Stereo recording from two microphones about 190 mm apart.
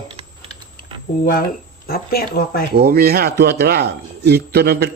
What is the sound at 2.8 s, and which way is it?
Speech, 55° right (ahead or behind).